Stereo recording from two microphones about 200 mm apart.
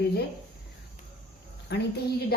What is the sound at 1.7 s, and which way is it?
Speech, 55° left (ahead or behind).